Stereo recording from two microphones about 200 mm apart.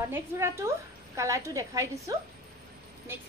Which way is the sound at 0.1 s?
15° right (ahead or behind).